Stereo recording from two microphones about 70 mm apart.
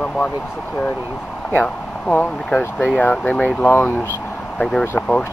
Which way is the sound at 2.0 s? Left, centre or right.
Centre.